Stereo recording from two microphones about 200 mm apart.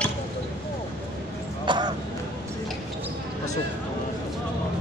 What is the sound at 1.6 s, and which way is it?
Speech, 25° right (ahead or behind).